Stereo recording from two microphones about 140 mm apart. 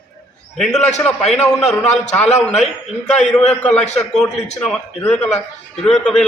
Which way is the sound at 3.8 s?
55° left (ahead or behind).